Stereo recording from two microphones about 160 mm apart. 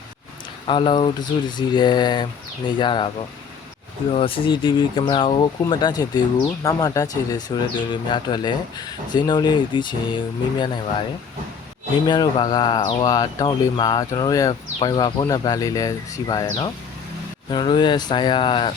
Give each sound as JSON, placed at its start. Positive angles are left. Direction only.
{"t": 0.7, "sound": "speech", "side_deg": 30}
{"t": 4.1, "sound": "speech", "side_deg": 35}
{"t": 12.0, "sound": "speech", "side_deg": 25}